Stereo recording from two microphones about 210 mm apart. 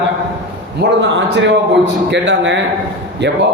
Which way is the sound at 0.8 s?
55° right (ahead or behind).